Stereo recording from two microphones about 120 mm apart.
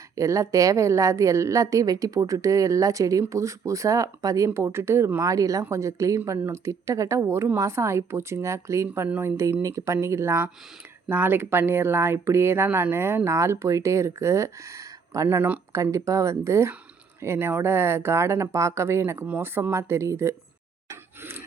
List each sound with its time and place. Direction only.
0.2 s a woman's voice: 25° right (ahead or behind)
9.0 s a woman's voice: 15° right (ahead or behind)
9.4 s a woman's voice: 25° right (ahead or behind)
15.7 s a woman's voice: 25° right (ahead or behind)
20.9 s a sound: 20° right (ahead or behind)